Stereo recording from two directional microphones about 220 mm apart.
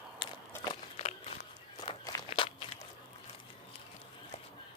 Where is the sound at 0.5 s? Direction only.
20° left (ahead or behind).